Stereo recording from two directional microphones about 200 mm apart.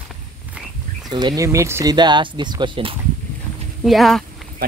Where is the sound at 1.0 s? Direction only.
20° right (ahead or behind).